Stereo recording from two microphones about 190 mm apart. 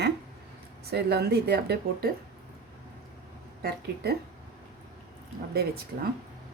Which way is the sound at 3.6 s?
55° right (ahead or behind).